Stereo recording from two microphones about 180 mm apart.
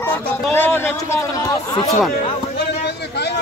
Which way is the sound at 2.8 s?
65° left (ahead or behind).